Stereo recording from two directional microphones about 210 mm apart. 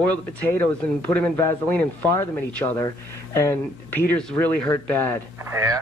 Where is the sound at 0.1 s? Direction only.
10° left (ahead or behind).